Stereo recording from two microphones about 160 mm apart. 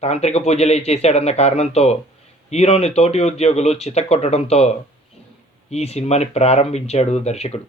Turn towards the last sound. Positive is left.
turn(degrees=40)  # may be behind; listen again after turning